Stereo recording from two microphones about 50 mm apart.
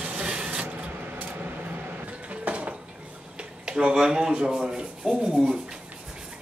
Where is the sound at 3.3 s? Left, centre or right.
Centre.